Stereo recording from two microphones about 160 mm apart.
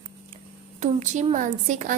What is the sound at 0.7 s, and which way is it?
A woman's voice, 45° right (ahead or behind).